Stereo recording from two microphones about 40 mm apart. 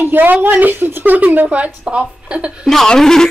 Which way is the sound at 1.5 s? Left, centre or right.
Right.